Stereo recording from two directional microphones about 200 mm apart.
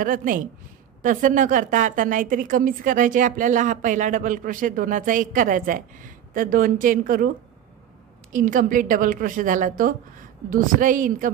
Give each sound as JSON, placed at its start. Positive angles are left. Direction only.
{"t": 0.0, "sound": "a woman's voice", "side_deg": -40}
{"t": 8.3, "sound": "a woman's voice", "side_deg": -40}